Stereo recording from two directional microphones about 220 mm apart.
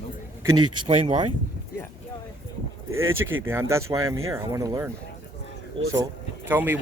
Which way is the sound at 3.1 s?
65° right (ahead or behind).